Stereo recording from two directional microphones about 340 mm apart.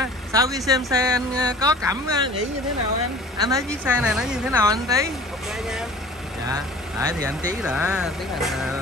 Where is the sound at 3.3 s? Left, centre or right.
Centre.